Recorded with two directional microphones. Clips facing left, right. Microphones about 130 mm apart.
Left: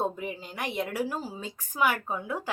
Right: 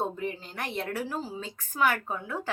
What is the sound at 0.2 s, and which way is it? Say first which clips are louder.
A woman's voice: right 1 dB; 10° left (ahead or behind).